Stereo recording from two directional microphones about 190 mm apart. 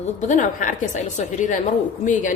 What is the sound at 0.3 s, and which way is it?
A woman's voice, 40° left (ahead or behind).